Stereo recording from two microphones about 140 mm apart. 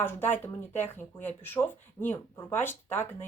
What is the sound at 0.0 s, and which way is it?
Speech, 15° left (ahead or behind).